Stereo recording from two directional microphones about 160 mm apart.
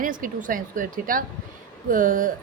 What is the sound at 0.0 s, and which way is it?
Speech, 60° right (ahead or behind).